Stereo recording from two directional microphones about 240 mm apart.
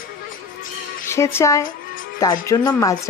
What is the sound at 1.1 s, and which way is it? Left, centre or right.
A woman's voice, centre.